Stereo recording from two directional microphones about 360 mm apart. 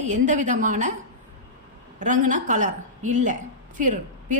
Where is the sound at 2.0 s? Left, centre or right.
Right.